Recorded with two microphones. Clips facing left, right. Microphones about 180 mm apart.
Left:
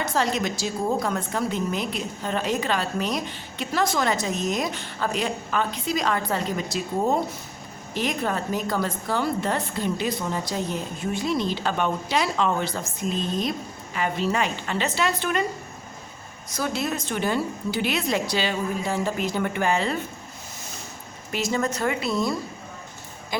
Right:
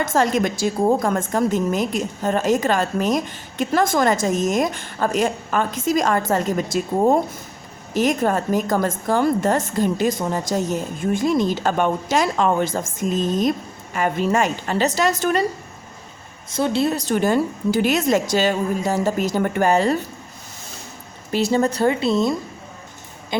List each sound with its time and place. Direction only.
0.0 s a woman's voice: 50° right (ahead or behind)
16.5 s a woman's voice: 25° right (ahead or behind); by 20.0 s 40° right (ahead or behind)
21.3 s a woman's voice: 30° right (ahead or behind)